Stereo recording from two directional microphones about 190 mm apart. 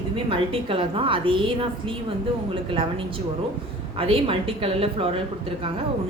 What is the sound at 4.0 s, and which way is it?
A woman's voice, 30° right (ahead or behind).